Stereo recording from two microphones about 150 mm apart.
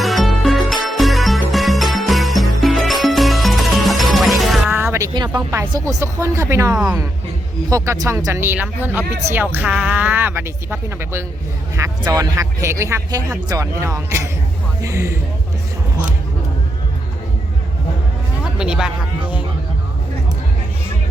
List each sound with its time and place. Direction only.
0.0 s music: centre (ahead or behind)
4.7 s speech: 15° right (ahead or behind)
6.7 s a woman's voice: 5° right (ahead or behind)
7.7 s a woman's voice: 20° right (ahead or behind)
18.5 s speech: 5° right (ahead or behind)